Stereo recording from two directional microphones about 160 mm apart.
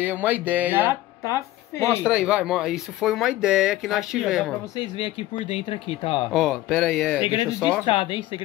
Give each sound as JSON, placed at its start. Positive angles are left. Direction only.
{"t": 0.0, "sound": "music", "side_deg": -10}
{"t": 1.2, "sound": "a woman's voice", "side_deg": 20}
{"t": 1.9, "sound": "speech", "side_deg": -5}
{"t": 4.7, "sound": "speech", "side_deg": 35}
{"t": 6.3, "sound": "speech", "side_deg": -5}
{"t": 7.8, "sound": "speech", "side_deg": 35}